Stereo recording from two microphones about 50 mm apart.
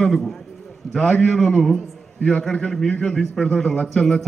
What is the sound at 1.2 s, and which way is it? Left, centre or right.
A man's voice, centre.